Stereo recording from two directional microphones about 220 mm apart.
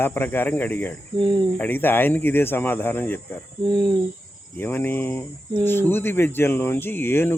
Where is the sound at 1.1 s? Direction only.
20° right (ahead or behind).